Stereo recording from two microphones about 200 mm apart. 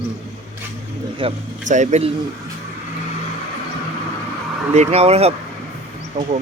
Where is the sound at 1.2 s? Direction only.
25° right (ahead or behind).